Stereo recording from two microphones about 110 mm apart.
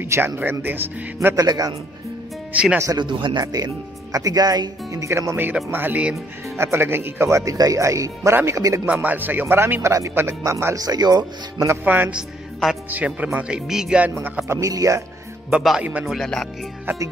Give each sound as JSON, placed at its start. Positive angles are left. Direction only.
{"t": 0.0, "sound": "speech", "side_deg": -20}
{"t": 1.3, "sound": "speech", "side_deg": -35}
{"t": 2.5, "sound": "speech", "side_deg": -10}
{"t": 3.0, "sound": "speech", "side_deg": -45}
{"t": 3.5, "sound": "speech", "side_deg": -35}
{"t": 8.8, "sound": "speech", "side_deg": -15}
{"t": 11.6, "sound": "speech", "side_deg": -20}
{"t": 14.1, "sound": "speech", "side_deg": -20}
{"t": 14.6, "sound": "speech", "side_deg": -30}
{"t": 15.8, "sound": "speech", "side_deg": -15}
{"t": 16.1, "sound": "speech", "side_deg": 5}